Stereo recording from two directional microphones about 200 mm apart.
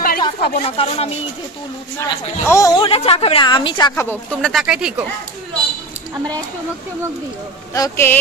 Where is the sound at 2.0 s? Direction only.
15° left (ahead or behind).